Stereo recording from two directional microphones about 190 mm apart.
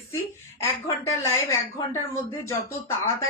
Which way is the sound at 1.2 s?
15° left (ahead or behind).